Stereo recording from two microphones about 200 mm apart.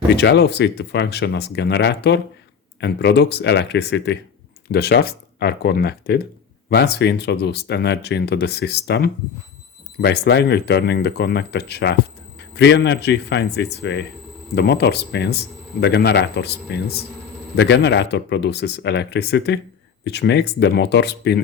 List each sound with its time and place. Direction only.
0.2 s speech: 55° left (ahead or behind)